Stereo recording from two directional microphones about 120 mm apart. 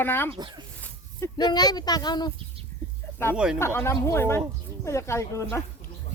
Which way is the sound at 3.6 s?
20° left (ahead or behind).